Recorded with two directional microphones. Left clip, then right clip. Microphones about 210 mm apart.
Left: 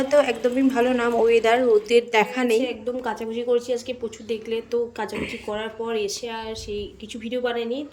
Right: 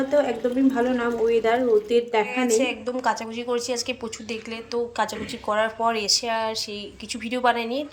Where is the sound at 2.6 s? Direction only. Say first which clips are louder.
Right 1 dB; 10° left (ahead or behind).